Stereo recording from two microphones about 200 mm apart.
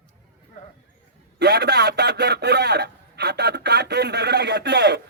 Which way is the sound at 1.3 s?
55° right (ahead or behind).